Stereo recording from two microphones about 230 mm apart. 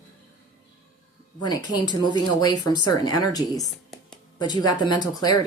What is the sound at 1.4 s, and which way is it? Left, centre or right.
Speech, centre.